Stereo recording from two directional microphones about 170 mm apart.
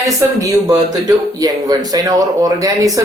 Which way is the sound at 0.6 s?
20° right (ahead or behind).